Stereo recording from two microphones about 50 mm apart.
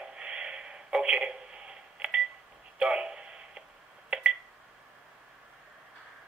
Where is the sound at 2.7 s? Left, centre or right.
Centre.